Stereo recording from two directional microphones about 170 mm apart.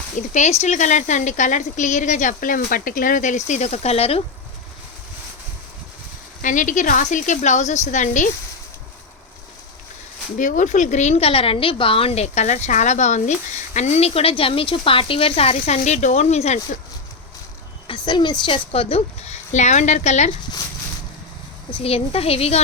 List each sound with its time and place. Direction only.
0.2 s speech: 45° left (ahead or behind)
6.4 s speech: 50° left (ahead or behind)
10.3 s a woman's voice: 50° left (ahead or behind)
17.8 s a woman's voice: 25° left (ahead or behind); by 20.3 s 45° left (ahead or behind)
21.7 s a woman's voice: 35° left (ahead or behind)